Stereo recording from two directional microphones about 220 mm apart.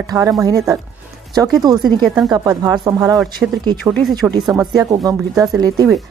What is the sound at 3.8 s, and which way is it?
Speech, 5° right (ahead or behind).